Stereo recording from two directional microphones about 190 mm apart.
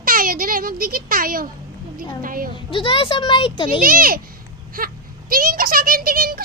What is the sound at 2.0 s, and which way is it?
Speech, 50° right (ahead or behind).